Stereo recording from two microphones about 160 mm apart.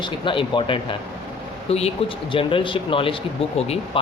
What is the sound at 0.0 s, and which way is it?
Speech, 30° left (ahead or behind).